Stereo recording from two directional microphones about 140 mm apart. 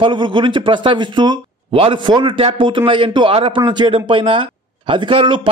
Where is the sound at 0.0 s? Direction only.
35° right (ahead or behind).